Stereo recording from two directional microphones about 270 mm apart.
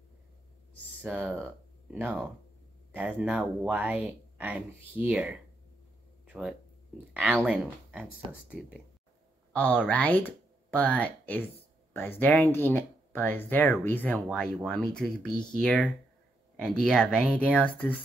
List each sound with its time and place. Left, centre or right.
1.0 s speech: centre
6.2 s a sound: centre
7.3 s speech: centre